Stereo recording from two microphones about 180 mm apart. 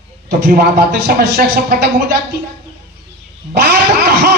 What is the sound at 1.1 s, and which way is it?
Speech, 60° right (ahead or behind).